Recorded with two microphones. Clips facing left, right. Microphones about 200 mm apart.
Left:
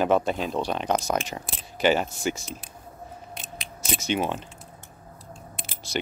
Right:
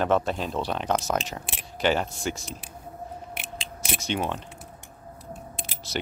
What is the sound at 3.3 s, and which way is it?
Scissors, 75° right (ahead or behind).